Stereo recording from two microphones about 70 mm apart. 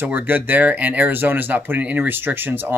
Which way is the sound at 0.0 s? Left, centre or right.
Right.